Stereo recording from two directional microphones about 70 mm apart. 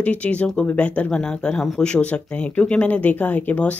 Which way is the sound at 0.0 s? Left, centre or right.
Left.